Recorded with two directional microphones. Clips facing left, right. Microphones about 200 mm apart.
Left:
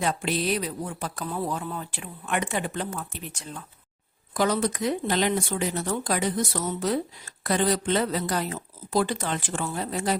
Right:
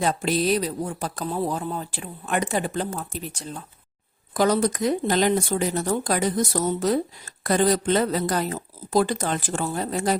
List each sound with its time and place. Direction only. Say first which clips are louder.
0.0 s speech: right 4 dB; 40° right (ahead or behind)